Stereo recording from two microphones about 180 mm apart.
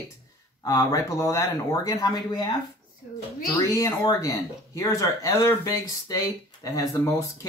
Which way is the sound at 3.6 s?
20° left (ahead or behind).